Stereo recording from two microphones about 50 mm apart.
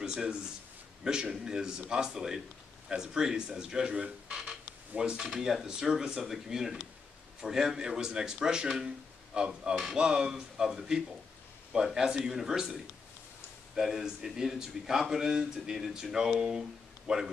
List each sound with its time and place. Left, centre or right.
0.0 s speech: centre
4.4 s a sound: centre
5.3 s speech: centre